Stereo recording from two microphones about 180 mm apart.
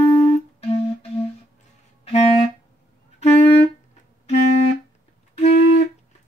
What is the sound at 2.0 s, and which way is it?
Clarinet, 35° left (ahead or behind).